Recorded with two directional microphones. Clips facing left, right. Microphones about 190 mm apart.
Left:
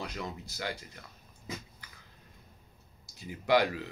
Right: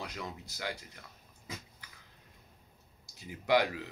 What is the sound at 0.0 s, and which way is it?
Speech, 15° right (ahead or behind).